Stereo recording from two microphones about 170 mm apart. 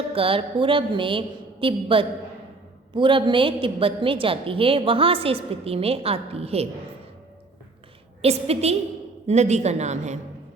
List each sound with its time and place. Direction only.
0.1 s a woman's voice: 35° right (ahead or behind)
8.2 s a woman's voice: 35° right (ahead or behind)